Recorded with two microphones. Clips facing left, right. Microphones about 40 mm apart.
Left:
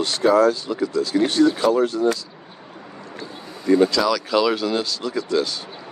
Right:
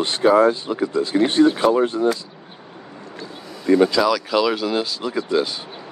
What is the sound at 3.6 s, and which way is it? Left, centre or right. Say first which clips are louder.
Speech: right 1 dB; right.